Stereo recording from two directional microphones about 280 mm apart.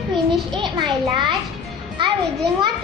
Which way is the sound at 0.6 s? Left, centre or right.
Centre.